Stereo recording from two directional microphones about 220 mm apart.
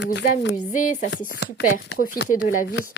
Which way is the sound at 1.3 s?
50° left (ahead or behind).